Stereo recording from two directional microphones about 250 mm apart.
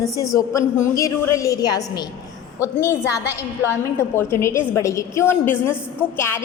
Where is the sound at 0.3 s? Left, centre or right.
Centre.